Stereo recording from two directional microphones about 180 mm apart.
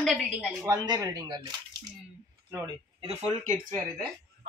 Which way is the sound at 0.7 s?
20° right (ahead or behind).